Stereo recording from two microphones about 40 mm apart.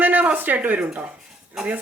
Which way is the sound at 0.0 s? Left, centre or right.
Right.